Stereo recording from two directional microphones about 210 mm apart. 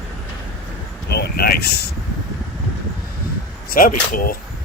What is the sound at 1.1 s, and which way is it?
Speech, 50° left (ahead or behind).